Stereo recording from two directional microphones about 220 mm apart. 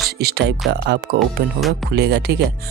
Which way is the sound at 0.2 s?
45° right (ahead or behind).